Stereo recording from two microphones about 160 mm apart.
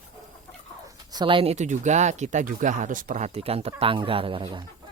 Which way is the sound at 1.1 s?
30° right (ahead or behind).